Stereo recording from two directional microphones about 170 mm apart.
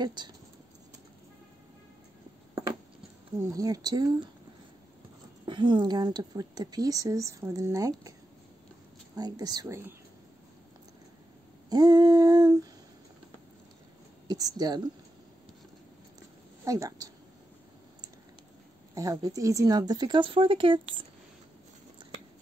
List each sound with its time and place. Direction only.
0.0 s a woman's voice: 25° right (ahead or behind)
2.5 s a sound: 20° right (ahead or behind)
3.3 s a woman's voice: 20° right (ahead or behind)
5.4 s a woman's voice: 25° right (ahead or behind)
9.1 s a woman's voice: 25° right (ahead or behind)
11.7 s a woman's voice: 25° right (ahead or behind)
14.6 s a woman's voice: 25° right (ahead or behind)
16.6 s a woman's voice: 20° right (ahead or behind)
18.9 s a woman's voice: 20° right (ahead or behind)